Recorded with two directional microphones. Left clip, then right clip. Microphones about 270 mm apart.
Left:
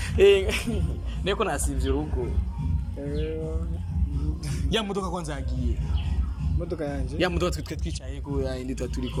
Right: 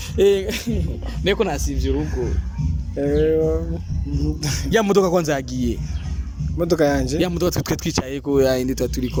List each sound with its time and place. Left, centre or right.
0.2 s speech: centre
3.0 s speech: right
4.9 s speech: right
7.2 s speech: centre
7.5 s speech: right
8.7 s speech: centre